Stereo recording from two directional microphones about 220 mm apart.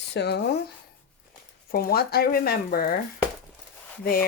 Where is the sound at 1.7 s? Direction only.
45° left (ahead or behind).